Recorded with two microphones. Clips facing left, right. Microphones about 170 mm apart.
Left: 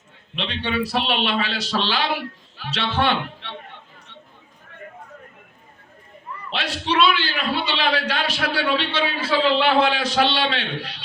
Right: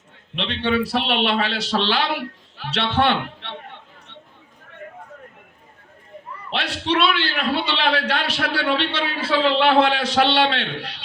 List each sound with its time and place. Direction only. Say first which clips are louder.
0.3 s a man's voice: right 3 dB; 65° right (ahead or behind)
6.5 s a man's voice: right 2 dB; 65° right (ahead or behind)